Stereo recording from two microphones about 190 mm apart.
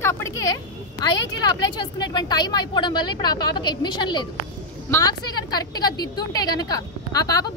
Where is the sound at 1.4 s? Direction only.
25° left (ahead or behind).